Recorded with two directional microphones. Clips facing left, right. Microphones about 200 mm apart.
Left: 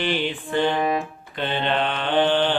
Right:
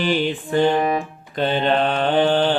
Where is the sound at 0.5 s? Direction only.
40° right (ahead or behind).